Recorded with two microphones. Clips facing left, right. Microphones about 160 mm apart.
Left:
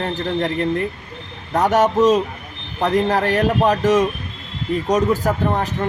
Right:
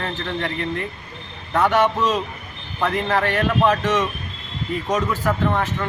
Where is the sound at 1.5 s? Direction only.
40° left (ahead or behind).